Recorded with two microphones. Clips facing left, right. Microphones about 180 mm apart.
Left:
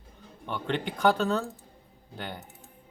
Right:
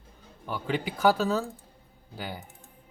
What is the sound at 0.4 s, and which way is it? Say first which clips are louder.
Speech: even; 5° right (ahead or behind).